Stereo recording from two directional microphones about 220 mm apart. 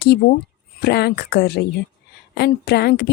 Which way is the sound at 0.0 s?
50° left (ahead or behind).